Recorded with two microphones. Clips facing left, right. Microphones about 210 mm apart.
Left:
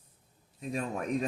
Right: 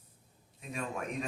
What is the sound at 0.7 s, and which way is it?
Speech, 35° left (ahead or behind).